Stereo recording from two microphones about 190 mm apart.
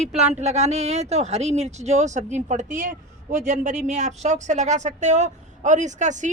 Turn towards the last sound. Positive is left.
turn(degrees=-40)  # may be behind; listen again after turning